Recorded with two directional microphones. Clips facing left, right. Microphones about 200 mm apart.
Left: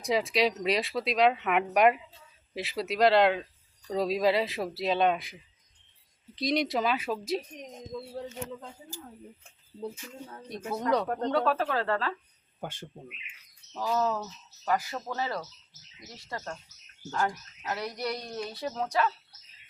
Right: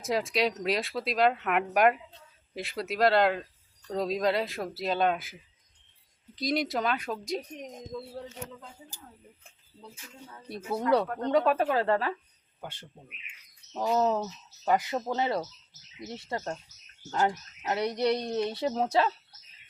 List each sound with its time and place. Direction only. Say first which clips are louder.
0.0 s speech: left 1 dB; centre (ahead or behind)
10.7 s speech: right 2 dB; 10° right (ahead or behind)
13.7 s a woman's voice: right 3 dB; 20° right (ahead or behind)